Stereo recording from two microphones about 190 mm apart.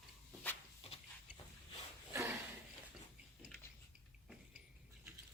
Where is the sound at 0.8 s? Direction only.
30° left (ahead or behind).